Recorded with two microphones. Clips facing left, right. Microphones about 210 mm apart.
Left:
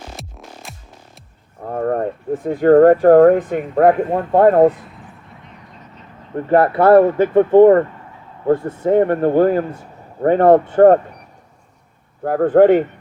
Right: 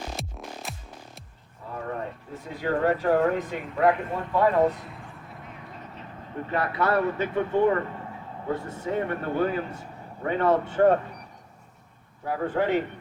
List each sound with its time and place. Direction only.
0.2 s music: centre (ahead or behind)
1.6 s speech: 55° left (ahead or behind)
6.5 s a man's voice: 55° left (ahead or behind)
12.2 s speech: 55° left (ahead or behind)